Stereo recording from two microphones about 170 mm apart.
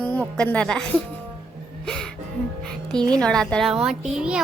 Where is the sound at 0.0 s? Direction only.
10° left (ahead or behind).